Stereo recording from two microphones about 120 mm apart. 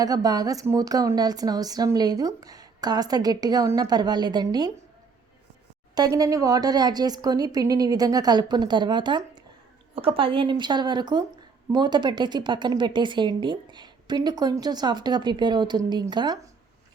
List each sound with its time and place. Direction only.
0.0 s speech: 30° right (ahead or behind)
5.9 s speech: 30° right (ahead or behind)
9.9 s speech: 50° right (ahead or behind)